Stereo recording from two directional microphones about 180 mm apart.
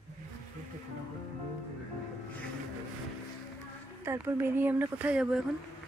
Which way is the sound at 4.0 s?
15° right (ahead or behind).